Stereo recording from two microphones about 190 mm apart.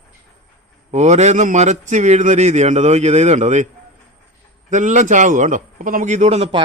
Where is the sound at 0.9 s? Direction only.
35° right (ahead or behind).